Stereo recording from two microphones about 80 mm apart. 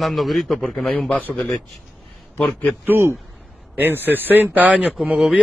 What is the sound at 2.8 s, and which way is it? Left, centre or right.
Speech, right.